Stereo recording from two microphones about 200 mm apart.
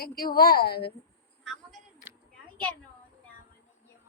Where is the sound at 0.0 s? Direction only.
50° left (ahead or behind).